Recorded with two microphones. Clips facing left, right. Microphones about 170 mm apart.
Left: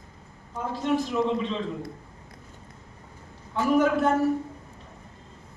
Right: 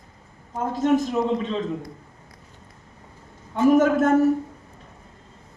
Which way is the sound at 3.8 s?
45° right (ahead or behind).